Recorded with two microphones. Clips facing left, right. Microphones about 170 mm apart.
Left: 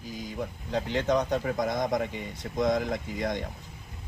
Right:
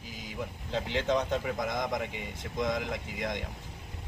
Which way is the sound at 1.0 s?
45° left (ahead or behind).